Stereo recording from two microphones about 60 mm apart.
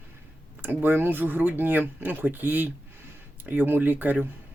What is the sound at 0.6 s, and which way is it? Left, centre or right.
Speech, right.